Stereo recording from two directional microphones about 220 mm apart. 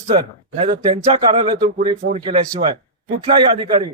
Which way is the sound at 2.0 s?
35° right (ahead or behind).